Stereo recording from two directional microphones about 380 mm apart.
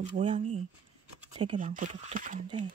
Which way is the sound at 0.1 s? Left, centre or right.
Centre.